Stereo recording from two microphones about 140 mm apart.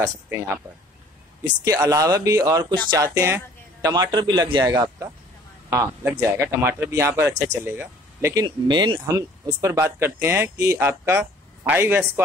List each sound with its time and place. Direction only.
1.6 s speech: 25° right (ahead or behind)
3.9 s a man's voice: 30° right (ahead or behind)
8.5 s a man's voice: 35° right (ahead or behind)
9.0 s speech: 25° right (ahead or behind)